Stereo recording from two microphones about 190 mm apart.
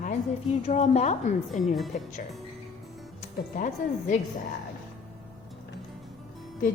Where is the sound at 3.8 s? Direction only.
45° left (ahead or behind).